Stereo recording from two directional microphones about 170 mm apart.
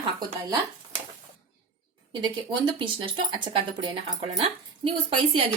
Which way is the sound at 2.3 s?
30° right (ahead or behind).